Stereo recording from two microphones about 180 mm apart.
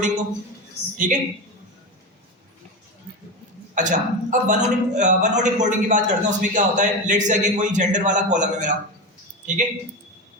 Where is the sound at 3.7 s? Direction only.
45° right (ahead or behind).